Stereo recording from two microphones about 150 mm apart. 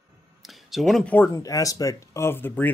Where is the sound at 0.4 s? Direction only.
Centre (ahead or behind).